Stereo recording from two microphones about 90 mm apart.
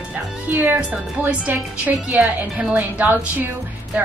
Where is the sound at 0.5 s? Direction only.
20° right (ahead or behind).